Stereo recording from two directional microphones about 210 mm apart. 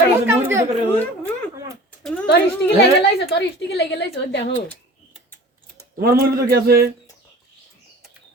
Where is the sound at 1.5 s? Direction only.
15° right (ahead or behind).